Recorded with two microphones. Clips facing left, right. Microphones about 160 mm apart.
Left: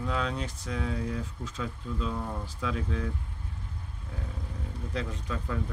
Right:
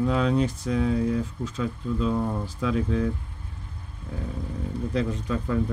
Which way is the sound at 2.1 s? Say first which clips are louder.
Right 10 dB; 30° right (ahead or behind).